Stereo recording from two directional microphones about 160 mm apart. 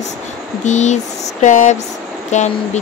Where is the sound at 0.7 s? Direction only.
45° left (ahead or behind).